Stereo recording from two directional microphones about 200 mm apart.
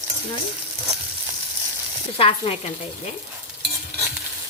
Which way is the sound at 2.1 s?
30° left (ahead or behind).